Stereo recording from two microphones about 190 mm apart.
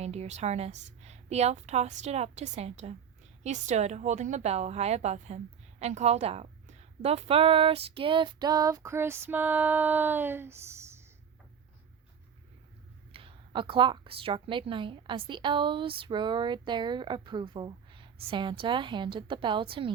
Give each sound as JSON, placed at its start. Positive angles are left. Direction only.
{"t": 0.0, "sound": "a woman's voice", "side_deg": -35}
{"t": 13.1, "sound": "a woman's voice", "side_deg": -25}